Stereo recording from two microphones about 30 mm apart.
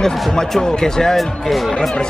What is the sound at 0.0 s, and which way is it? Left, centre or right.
Speech, centre.